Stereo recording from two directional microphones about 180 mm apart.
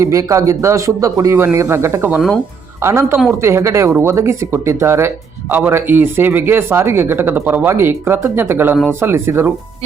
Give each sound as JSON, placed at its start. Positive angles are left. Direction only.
{"t": 0.0, "sound": "speech", "side_deg": -15}